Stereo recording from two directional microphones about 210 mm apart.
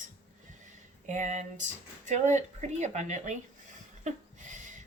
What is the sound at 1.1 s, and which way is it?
A woman's voice, 35° right (ahead or behind).